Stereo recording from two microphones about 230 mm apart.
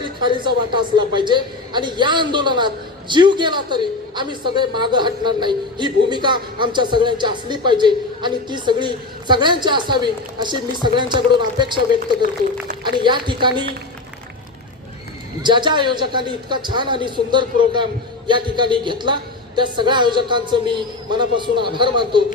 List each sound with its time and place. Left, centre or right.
0.0 s a man's voice: right
12.8 s a man's voice: centre
15.4 s a man's voice: centre